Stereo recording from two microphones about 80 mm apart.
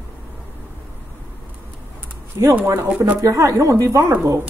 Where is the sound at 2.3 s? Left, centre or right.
Right.